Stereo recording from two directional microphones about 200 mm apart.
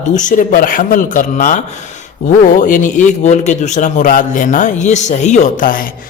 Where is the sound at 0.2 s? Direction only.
40° left (ahead or behind).